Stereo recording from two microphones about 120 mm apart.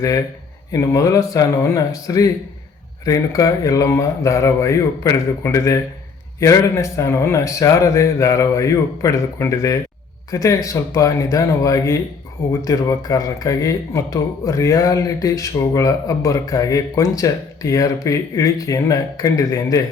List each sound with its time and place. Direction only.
0.7 s speech: 25° left (ahead or behind)